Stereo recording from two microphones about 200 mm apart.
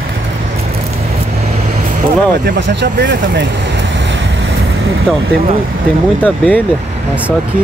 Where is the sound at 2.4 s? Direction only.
60° right (ahead or behind).